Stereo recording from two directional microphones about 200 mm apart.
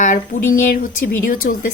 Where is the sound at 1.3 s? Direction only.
45° left (ahead or behind).